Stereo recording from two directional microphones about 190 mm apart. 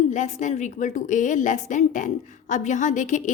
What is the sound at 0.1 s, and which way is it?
A woman's voice, 40° left (ahead or behind).